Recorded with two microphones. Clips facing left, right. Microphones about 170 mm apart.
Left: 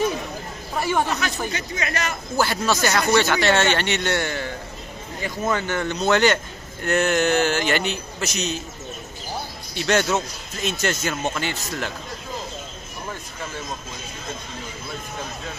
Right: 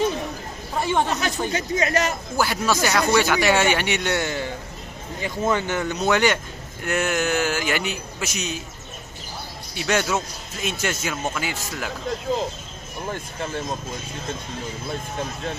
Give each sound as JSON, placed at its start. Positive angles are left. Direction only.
{"t": 0.7, "sound": "speech", "side_deg": -25}
{"t": 1.5, "sound": "speech", "side_deg": -40}
{"t": 2.3, "sound": "speech", "side_deg": -10}
{"t": 5.5, "sound": "speech", "side_deg": -15}
{"t": 5.9, "sound": "speech", "side_deg": -5}
{"t": 9.8, "sound": "speech", "side_deg": -5}